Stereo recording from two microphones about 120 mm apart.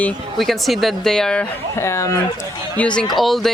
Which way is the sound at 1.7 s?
25° left (ahead or behind).